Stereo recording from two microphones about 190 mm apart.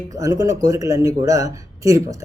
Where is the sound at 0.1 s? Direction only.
15° right (ahead or behind).